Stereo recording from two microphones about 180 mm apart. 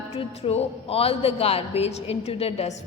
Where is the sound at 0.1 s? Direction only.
35° left (ahead or behind).